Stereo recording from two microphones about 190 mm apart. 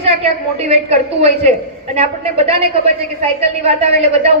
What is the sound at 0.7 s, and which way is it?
A woman's voice, 35° right (ahead or behind).